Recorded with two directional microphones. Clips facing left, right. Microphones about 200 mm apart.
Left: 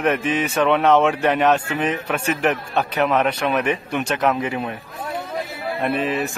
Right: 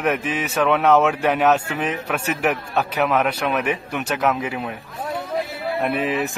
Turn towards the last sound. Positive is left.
turn(degrees=-15)  # may be behind; listen again after turning